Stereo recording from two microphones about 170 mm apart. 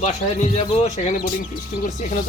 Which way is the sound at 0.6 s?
40° left (ahead or behind).